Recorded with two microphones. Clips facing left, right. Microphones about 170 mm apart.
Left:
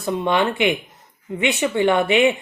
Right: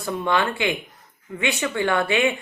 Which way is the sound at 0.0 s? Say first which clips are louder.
Left 3 dB; 20° left (ahead or behind).